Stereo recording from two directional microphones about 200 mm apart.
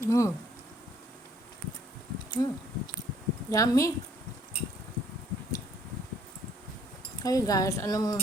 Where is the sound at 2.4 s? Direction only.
20° left (ahead or behind).